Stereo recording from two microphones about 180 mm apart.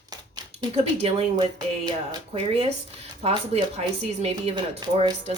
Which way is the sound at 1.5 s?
20° right (ahead or behind).